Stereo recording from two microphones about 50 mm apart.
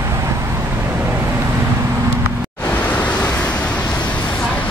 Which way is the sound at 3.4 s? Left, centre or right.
Left.